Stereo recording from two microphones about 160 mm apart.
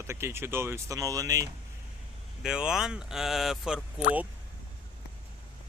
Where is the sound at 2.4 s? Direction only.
5° right (ahead or behind).